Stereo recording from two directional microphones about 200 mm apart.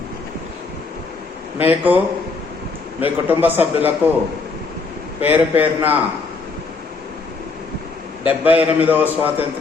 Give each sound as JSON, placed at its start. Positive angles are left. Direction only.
{"t": 1.5, "sound": "a man's voice", "side_deg": -10}
{"t": 3.0, "sound": "a man's voice", "side_deg": -10}
{"t": 5.2, "sound": "a man's voice", "side_deg": -10}
{"t": 8.3, "sound": "a man's voice", "side_deg": -5}